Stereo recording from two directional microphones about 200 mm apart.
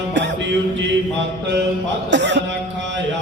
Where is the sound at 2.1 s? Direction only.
60° right (ahead or behind).